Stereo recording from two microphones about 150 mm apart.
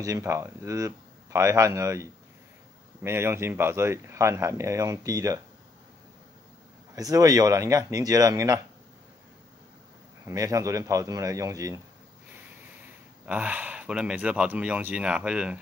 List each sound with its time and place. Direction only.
0.0 s speech: 20° right (ahead or behind)
7.0 s speech: 25° right (ahead or behind)
10.2 s speech: 20° right (ahead or behind)
13.2 s speech: 10° right (ahead or behind)